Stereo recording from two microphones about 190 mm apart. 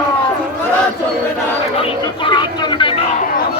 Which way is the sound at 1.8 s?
25° left (ahead or behind).